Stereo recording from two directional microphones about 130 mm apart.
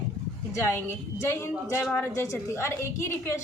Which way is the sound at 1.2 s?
20° left (ahead or behind).